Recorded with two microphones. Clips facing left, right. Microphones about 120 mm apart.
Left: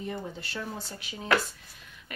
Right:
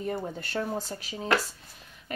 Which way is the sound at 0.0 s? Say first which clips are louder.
Right 4 dB; 45° right (ahead or behind).